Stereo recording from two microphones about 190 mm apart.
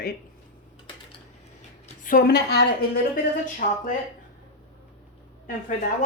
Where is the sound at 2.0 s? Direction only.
55° left (ahead or behind).